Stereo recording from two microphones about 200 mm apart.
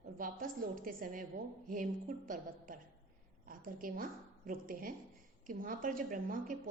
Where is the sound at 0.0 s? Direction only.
45° right (ahead or behind).